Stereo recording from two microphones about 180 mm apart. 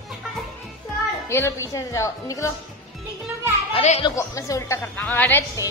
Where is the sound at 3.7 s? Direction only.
35° left (ahead or behind).